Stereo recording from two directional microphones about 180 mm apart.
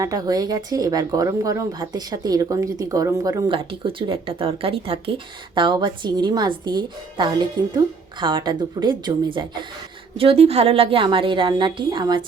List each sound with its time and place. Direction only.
0.0 s speech: 20° right (ahead or behind)
3.6 s speech: 30° right (ahead or behind)